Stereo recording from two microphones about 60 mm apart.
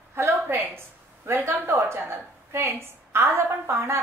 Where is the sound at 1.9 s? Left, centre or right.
Right.